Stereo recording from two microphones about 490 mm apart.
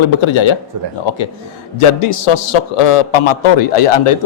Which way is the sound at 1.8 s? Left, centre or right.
Left.